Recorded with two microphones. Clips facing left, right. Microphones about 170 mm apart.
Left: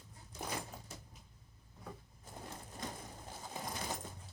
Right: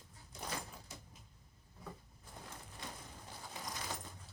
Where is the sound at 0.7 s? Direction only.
45° left (ahead or behind).